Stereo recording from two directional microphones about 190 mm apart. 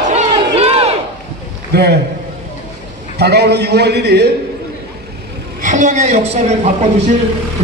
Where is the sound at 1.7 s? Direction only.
60° right (ahead or behind).